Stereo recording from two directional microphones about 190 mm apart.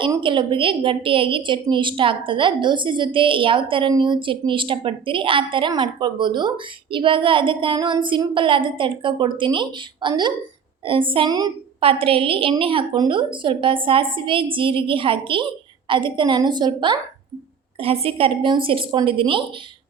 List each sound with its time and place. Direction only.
0.0 s a woman's voice: 25° right (ahead or behind)